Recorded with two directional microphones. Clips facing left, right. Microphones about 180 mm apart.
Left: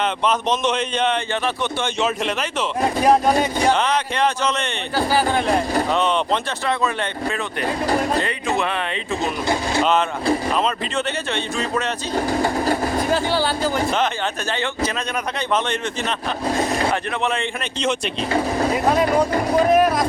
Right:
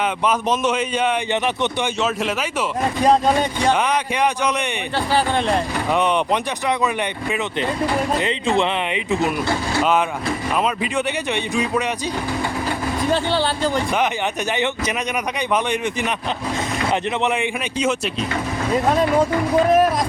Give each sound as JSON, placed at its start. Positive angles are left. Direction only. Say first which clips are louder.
{"t": 0.3, "sound": "speech", "louder": "right 1 dB", "side_deg": -10}
{"t": 3.7, "sound": "speech", "louder": "even", "side_deg": -10}
{"t": 4.9, "sound": "speech", "louder": "left 1 dB", "side_deg": 5}
{"t": 5.9, "sound": "speech", "louder": "right 5 dB", "side_deg": -15}
{"t": 10.9, "sound": "speech", "louder": "right 2 dB", "side_deg": -15}
{"t": 12.1, "sound": "train", "louder": "left 4 dB", "side_deg": 40}
{"t": 13.3, "sound": "speech", "louder": "even", "side_deg": 5}
{"t": 14.5, "sound": "speech", "louder": "right 1 dB", "side_deg": -20}
{"t": 16.6, "sound": "vehicle", "louder": "left 3 dB", "side_deg": 30}
{"t": 16.9, "sound": "speech", "louder": "right 2 dB", "side_deg": -15}
{"t": 18.3, "sound": "speech", "louder": "left 3 dB", "side_deg": 40}
{"t": 19.7, "sound": "speech", "louder": "left 1 dB", "side_deg": 0}